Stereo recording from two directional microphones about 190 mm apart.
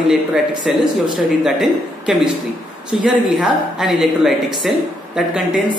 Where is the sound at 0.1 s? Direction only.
Centre (ahead or behind).